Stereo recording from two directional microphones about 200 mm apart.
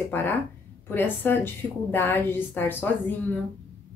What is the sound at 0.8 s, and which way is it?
Speech, 10° left (ahead or behind).